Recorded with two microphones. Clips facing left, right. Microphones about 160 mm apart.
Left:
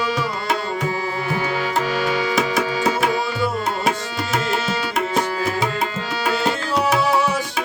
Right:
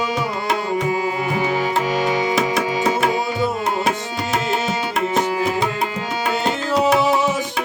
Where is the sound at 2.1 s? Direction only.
20° right (ahead or behind).